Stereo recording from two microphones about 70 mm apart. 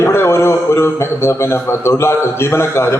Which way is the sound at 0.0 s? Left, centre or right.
Left.